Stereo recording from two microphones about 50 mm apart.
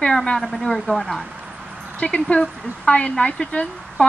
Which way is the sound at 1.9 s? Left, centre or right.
Left.